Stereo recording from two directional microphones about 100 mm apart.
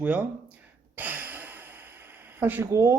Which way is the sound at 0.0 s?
15° right (ahead or behind).